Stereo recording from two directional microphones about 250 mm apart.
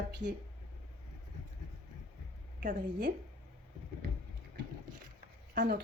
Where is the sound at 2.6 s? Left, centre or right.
Right.